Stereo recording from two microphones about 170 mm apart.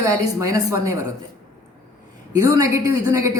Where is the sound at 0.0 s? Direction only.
20° right (ahead or behind).